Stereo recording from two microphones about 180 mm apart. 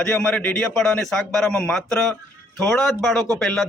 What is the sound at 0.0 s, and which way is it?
A man's voice, 5° left (ahead or behind).